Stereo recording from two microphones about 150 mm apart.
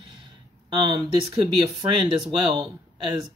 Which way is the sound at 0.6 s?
35° right (ahead or behind).